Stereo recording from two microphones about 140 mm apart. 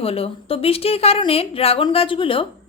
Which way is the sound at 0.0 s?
45° left (ahead or behind).